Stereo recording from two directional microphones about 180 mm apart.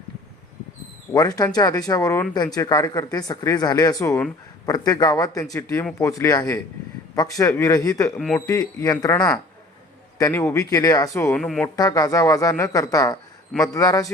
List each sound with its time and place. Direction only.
1.1 s speech: 20° left (ahead or behind)
11.4 s speech: 5° left (ahead or behind)
11.8 s speech: 20° left (ahead or behind)